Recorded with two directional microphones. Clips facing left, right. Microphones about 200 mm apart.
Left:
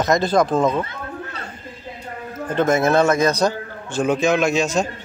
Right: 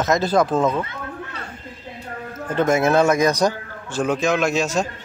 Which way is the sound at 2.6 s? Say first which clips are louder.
Even; 10° right (ahead or behind).